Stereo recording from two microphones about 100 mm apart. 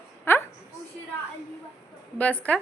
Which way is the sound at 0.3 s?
20° left (ahead or behind).